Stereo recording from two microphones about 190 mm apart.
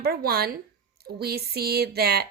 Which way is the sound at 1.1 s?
55° right (ahead or behind).